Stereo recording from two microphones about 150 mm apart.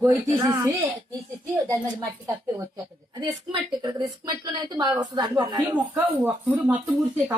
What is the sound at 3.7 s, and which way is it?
A woman's voice, 30° right (ahead or behind).